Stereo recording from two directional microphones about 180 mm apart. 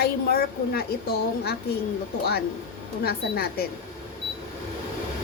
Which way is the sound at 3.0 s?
60° left (ahead or behind).